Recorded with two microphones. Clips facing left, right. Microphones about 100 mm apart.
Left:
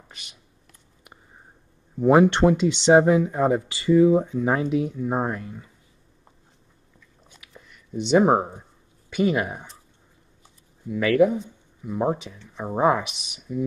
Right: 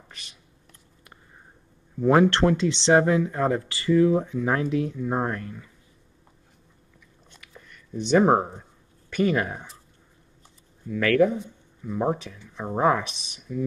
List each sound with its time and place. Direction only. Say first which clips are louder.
2.0 s speech: left 2 dB; 15° left (ahead or behind)
7.2 s biting: even; 5° left (ahead or behind)
7.9 s speech: left 1 dB; 15° left (ahead or behind)
8.3 s speech: even; 5° left (ahead or behind)
10.9 s speech: left 1 dB; 10° left (ahead or behind)